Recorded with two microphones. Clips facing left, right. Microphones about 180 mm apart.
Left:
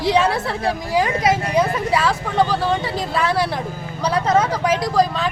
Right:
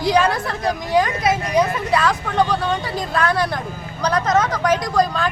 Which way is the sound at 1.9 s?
5° left (ahead or behind).